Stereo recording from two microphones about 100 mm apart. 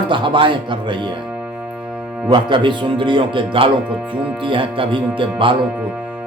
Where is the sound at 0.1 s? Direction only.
55° right (ahead or behind).